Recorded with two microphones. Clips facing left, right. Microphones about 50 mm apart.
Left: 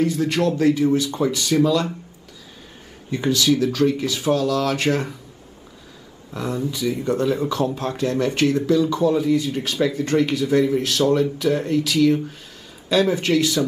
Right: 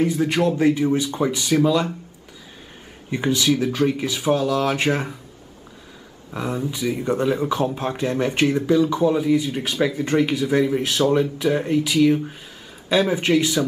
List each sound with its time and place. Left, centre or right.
0.0 s speech: centre
3.1 s speech: right
6.3 s speech: right